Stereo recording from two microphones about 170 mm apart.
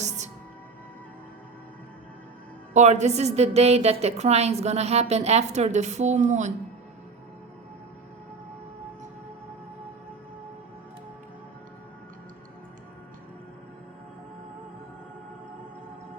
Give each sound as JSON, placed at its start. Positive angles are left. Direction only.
{"t": 2.7, "sound": "a woman's voice", "side_deg": -40}